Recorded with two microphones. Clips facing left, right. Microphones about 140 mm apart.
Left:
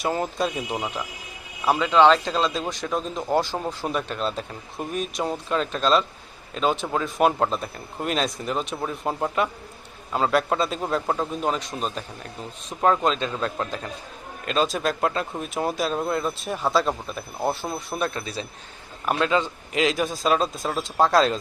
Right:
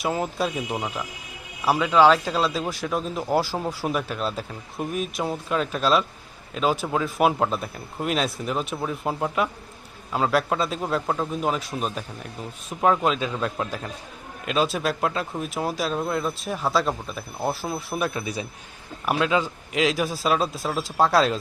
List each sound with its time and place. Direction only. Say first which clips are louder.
0.0 s speech: even; 5° right (ahead or behind)